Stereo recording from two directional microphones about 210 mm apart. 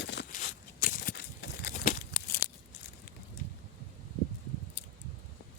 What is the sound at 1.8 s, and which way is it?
Tearing, 45° left (ahead or behind).